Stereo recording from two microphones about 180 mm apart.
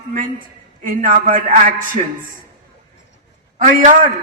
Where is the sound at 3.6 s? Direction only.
45° right (ahead or behind).